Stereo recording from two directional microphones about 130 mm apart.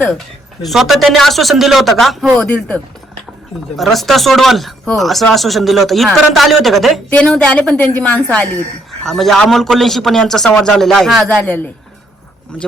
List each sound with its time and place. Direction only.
0.6 s a man's voice: centre (ahead or behind)